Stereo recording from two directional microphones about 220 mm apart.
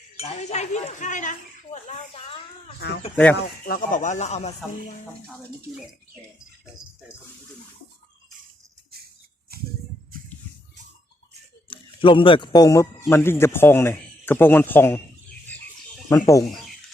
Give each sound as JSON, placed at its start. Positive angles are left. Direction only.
{"t": 0.2, "sound": "speech", "side_deg": 30}
{"t": 3.7, "sound": "speech", "side_deg": 35}
{"t": 11.7, "sound": "speech", "side_deg": 25}
{"t": 16.0, "sound": "speech", "side_deg": 15}